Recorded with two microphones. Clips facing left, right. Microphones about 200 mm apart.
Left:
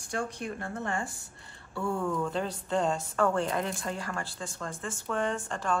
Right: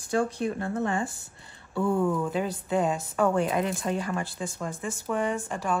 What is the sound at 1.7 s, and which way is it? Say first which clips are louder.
Speech: right 6 dB; 15° right (ahead or behind).